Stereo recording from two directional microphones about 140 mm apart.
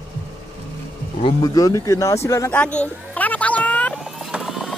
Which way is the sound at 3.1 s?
10° left (ahead or behind).